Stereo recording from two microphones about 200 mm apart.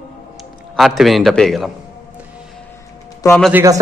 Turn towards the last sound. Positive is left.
turn(degrees=-15)  # may be behind; listen again after turning